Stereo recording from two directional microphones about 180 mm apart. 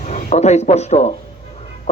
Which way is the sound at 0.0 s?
40° left (ahead or behind).